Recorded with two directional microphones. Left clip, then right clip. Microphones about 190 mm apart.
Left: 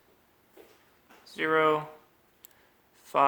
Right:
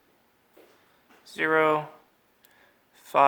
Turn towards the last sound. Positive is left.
turn(degrees=-35)  # may be behind; listen again after turning